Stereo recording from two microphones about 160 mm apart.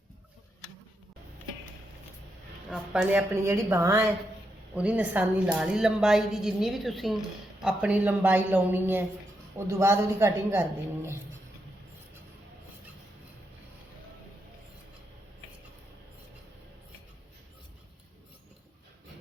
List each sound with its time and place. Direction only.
2.6 s a woman's voice: 5° right (ahead or behind)
4.7 s a woman's voice: 10° right (ahead or behind)